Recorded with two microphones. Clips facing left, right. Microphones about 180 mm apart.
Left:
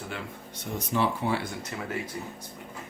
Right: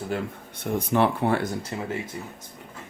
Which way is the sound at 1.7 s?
30° right (ahead or behind).